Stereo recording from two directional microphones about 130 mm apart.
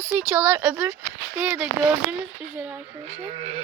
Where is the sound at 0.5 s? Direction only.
15° right (ahead or behind).